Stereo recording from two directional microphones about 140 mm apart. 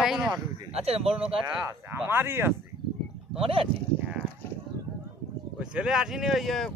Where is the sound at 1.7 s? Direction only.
15° right (ahead or behind).